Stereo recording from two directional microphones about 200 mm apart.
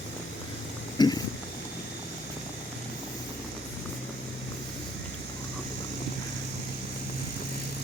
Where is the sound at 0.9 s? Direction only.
20° left (ahead or behind).